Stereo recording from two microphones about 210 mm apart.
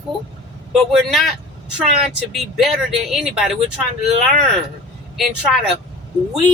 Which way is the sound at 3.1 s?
Centre (ahead or behind).